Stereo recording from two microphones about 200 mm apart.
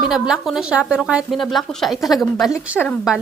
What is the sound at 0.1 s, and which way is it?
A woman's voice, centre (ahead or behind).